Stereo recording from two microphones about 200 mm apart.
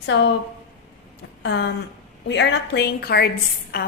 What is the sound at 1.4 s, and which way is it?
A woman's voice, 60° left (ahead or behind).